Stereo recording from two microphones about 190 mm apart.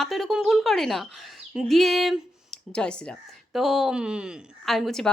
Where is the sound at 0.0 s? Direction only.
Centre (ahead or behind).